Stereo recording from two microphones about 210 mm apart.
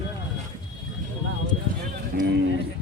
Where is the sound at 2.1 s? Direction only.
50° right (ahead or behind).